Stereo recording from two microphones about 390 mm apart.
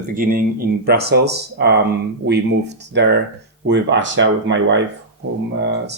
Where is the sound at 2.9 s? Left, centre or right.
Right.